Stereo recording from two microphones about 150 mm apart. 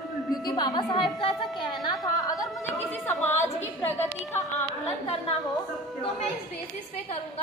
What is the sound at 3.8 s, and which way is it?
Speech, 15° left (ahead or behind).